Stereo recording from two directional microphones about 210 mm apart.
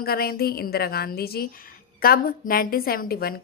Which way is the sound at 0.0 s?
45° left (ahead or behind).